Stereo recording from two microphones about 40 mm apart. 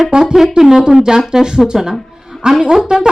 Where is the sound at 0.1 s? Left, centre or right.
Centre.